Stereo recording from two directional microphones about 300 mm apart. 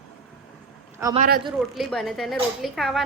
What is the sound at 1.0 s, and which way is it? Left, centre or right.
Speech, centre.